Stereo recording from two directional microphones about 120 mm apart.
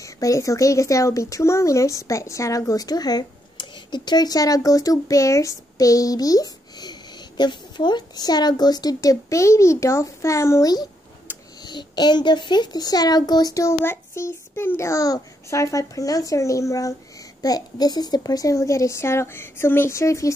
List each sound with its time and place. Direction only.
0.0 s speech: 25° left (ahead or behind)